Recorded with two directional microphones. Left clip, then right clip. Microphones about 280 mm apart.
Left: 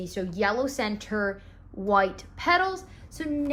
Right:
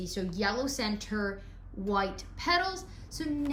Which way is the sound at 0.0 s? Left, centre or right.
Centre.